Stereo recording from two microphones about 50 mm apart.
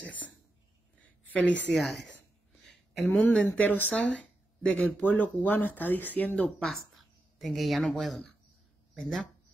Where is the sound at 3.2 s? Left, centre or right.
Left.